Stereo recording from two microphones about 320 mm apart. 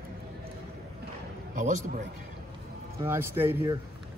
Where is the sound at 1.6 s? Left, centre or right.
Right.